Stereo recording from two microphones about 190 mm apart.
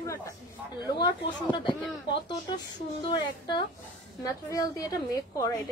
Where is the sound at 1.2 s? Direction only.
25° left (ahead or behind).